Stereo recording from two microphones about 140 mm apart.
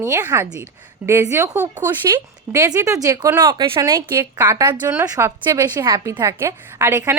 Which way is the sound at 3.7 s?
20° right (ahead or behind).